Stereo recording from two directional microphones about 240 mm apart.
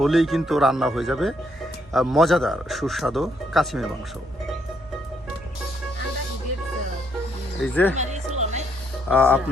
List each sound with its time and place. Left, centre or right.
0.0 s a man's voice: centre
7.6 s a man's voice: centre
7.9 s music: right
9.0 s speech: centre